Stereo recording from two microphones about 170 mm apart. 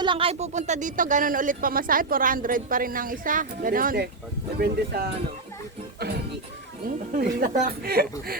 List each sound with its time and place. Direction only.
0.0 s a woman's voice: 30° right (ahead or behind); by 5.0 s 70° right (ahead or behind)
6.8 s a woman's voice: 60° right (ahead or behind)